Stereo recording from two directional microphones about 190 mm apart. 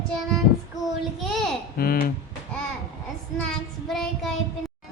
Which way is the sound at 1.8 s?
50° left (ahead or behind).